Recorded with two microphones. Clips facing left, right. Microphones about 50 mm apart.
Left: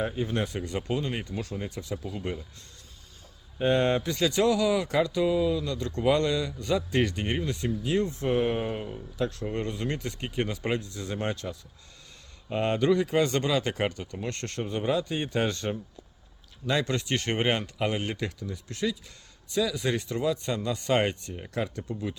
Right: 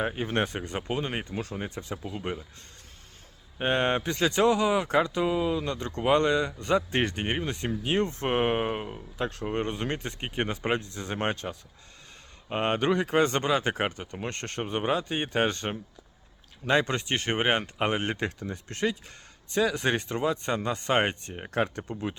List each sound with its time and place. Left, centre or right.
0.0 s speech: right
3.6 s speech: right
17.6 s speech: right